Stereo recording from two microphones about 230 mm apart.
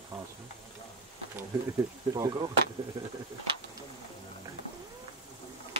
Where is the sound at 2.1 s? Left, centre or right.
Centre.